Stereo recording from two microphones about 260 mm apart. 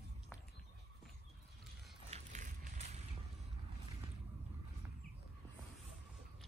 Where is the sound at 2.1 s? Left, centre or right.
Right.